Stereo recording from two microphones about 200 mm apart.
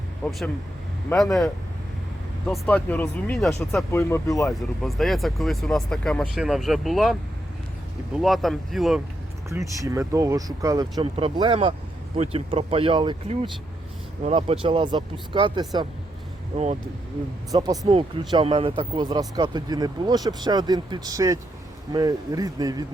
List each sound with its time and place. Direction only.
0.3 s speech: centre (ahead or behind)
2.5 s speech: 10° left (ahead or behind)
3.9 s speech: 15° left (ahead or behind)
4.8 s speech: centre (ahead or behind)
8.2 s speech: centre (ahead or behind)
9.5 s speech: 15° right (ahead or behind)
17.5 s speech: 20° right (ahead or behind)